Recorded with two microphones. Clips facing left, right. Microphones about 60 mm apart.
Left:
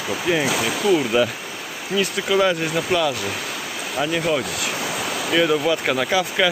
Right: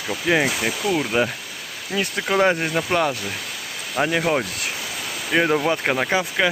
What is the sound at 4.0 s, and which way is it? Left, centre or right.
Speech, right.